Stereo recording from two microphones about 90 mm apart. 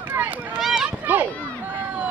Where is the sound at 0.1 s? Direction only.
15° right (ahead or behind).